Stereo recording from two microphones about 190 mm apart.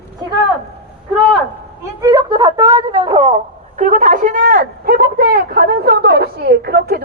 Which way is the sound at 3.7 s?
40° right (ahead or behind).